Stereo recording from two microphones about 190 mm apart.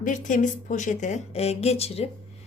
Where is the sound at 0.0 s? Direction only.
45° left (ahead or behind).